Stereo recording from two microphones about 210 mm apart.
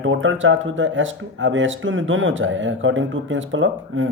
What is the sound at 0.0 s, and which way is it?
Speech, 65° right (ahead or behind).